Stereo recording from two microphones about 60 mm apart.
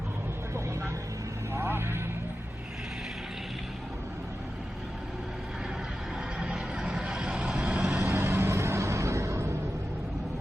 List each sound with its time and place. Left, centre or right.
1.5 s vehicle: right
6.4 s vehicle: centre
8.0 s vehicle: right